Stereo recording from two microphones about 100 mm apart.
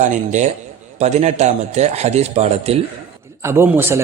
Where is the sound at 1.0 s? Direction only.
90° right.